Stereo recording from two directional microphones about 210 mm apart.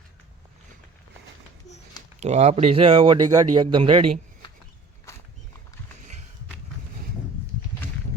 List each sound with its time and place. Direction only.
2.2 s speech: 30° right (ahead or behind)